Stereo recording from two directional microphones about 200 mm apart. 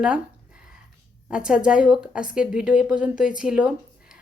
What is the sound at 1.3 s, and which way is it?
A woman's voice, 5° right (ahead or behind).